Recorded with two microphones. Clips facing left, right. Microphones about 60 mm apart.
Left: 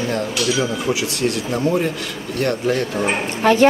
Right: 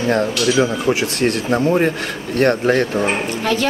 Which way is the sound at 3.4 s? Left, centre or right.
Left.